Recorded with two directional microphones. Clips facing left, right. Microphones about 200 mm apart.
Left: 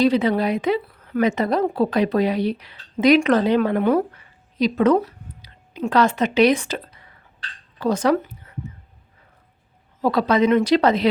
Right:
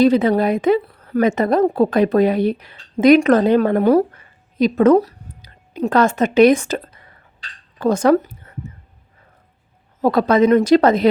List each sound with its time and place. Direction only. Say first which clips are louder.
0.0 s a woman's voice: right 4 dB; 50° right (ahead or behind)
10.0 s speech: right 4 dB; 50° right (ahead or behind)